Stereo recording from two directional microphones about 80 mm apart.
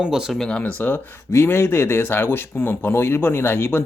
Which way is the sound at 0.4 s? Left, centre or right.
Centre.